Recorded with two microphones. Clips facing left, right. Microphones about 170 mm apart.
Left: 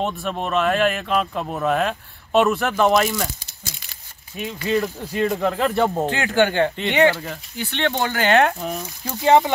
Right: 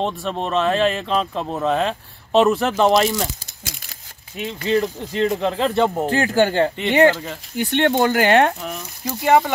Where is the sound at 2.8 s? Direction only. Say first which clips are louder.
Right 1 dB; 25° right (ahead or behind).